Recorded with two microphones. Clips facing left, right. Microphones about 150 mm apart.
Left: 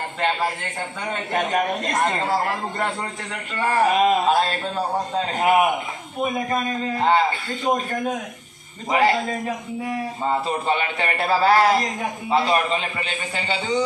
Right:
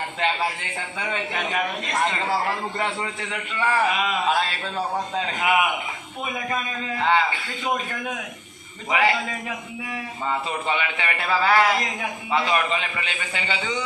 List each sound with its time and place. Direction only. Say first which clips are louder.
0.2 s a man's voice: left 2 dB; 45° left (ahead or behind)